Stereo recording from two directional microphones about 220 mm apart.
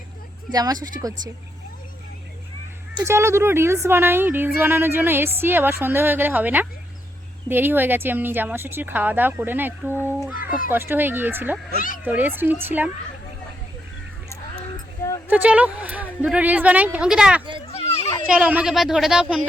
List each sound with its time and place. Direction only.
0.5 s speech: 15° right (ahead or behind)
2.9 s speech: 15° right (ahead or behind)
15.3 s speech: 5° right (ahead or behind)
17.7 s children playing: 30° left (ahead or behind)
18.3 s speech: 5° right (ahead or behind)